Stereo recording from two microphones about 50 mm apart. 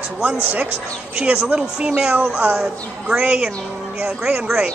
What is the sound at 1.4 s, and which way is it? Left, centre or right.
Speech, right.